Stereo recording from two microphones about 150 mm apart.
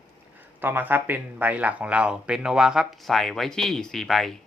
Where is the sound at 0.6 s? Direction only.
15° right (ahead or behind).